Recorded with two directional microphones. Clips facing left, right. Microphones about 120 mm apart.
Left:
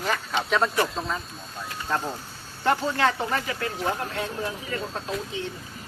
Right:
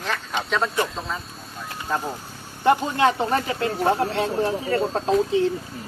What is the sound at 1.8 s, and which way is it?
Speech, 15° right (ahead or behind).